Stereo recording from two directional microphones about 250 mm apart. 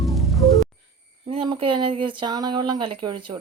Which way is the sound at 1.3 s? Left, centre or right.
Right.